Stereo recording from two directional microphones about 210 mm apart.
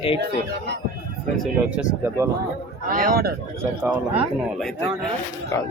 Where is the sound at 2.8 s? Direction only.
45° right (ahead or behind).